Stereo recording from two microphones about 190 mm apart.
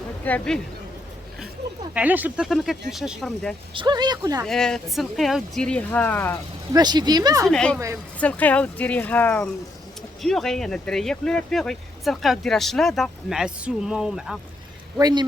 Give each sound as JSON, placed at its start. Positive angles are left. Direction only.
{"t": 0.3, "sound": "speech", "side_deg": 5}
{"t": 1.9, "sound": "speech", "side_deg": -10}
{"t": 3.8, "sound": "speech", "side_deg": -20}
{"t": 4.4, "sound": "speech", "side_deg": 5}
{"t": 6.7, "sound": "speech", "side_deg": -20}
{"t": 7.4, "sound": "speech", "side_deg": 5}
{"t": 14.9, "sound": "speech", "side_deg": -20}